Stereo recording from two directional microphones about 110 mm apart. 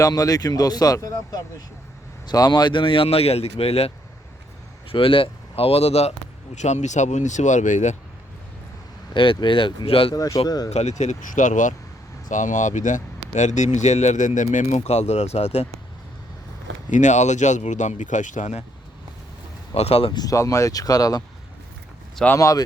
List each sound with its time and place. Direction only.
0.0 s speech: 35° left (ahead or behind); by 6.1 s 70° left (ahead or behind)
6.6 s speech: 90° left
9.1 s speech: 50° left (ahead or behind)
10.2 s speech: 35° left (ahead or behind)
10.7 s speech: 90° left
13.3 s speech: 90° left; by 15.6 s 70° left (ahead or behind)
17.0 s speech: 90° left
19.7 s speech: 65° left (ahead or behind)
20.1 s speech: 30° left (ahead or behind)
22.1 s speech: 10° left (ahead or behind)
22.4 s speech: 30° left (ahead or behind)